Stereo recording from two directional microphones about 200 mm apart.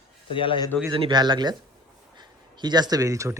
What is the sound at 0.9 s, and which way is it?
A man's voice, 25° right (ahead or behind).